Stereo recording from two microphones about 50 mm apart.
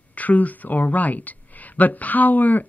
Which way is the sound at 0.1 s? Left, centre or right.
Left.